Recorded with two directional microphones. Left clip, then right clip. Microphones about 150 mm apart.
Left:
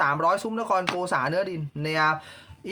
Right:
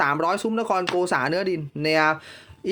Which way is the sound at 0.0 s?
45° right (ahead or behind).